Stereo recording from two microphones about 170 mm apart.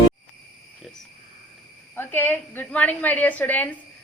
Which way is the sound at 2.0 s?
10° left (ahead or behind).